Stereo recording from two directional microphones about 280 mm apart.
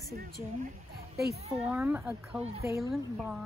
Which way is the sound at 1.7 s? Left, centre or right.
Centre.